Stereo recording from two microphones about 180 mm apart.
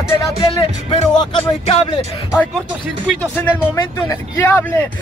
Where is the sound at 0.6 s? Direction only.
30° left (ahead or behind).